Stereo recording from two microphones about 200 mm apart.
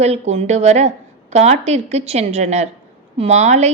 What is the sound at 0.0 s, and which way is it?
A woman's voice, 30° right (ahead or behind).